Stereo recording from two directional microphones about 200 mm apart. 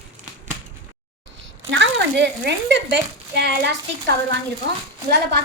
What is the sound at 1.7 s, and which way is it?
A woman's voice, 60° right (ahead or behind).